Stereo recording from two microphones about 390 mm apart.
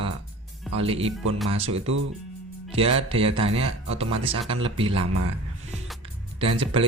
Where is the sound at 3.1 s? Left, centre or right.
Centre.